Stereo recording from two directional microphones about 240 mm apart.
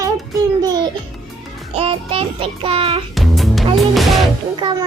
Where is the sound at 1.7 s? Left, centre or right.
Right.